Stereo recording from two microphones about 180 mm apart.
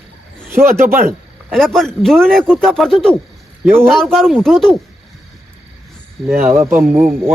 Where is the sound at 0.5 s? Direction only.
15° right (ahead or behind).